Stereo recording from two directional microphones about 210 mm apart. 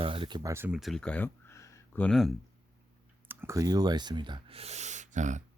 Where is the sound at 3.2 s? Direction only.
10° right (ahead or behind).